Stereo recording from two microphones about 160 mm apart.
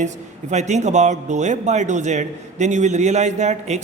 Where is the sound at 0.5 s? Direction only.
45° right (ahead or behind).